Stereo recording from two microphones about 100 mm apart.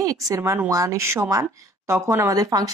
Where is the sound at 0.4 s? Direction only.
25° right (ahead or behind).